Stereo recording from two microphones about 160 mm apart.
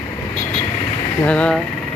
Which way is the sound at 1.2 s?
5° left (ahead or behind).